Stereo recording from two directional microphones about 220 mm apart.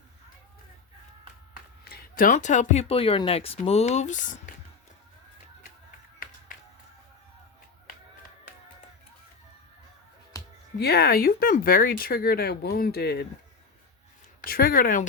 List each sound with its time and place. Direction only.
1.8 s speech: 40° left (ahead or behind)
10.8 s speech: 45° left (ahead or behind)
14.4 s speech: 40° left (ahead or behind)